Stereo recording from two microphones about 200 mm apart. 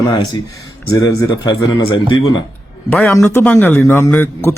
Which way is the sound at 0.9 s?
15° left (ahead or behind).